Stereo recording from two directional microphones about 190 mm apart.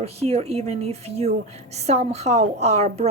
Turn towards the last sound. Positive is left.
turn(degrees=-35)  # may be behind; listen again after turning